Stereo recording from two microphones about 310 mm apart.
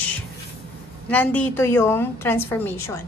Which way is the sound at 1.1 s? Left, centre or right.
Centre.